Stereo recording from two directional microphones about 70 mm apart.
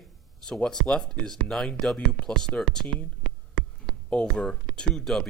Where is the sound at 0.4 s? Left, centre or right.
Centre.